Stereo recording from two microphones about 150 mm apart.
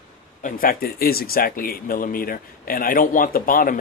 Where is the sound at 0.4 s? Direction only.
65° left (ahead or behind).